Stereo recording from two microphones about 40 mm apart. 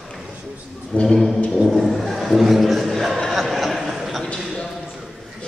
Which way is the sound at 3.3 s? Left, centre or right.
Centre.